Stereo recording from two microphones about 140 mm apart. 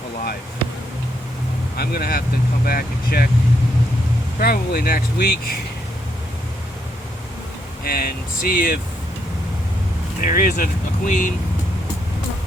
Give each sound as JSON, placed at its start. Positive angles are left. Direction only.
{"t": 1.7, "sound": "speech", "side_deg": 90}
{"t": 4.4, "sound": "speech", "side_deg": 90}
{"t": 7.9, "sound": "speech", "side_deg": 90}
{"t": 10.2, "sound": "speech", "side_deg": 75}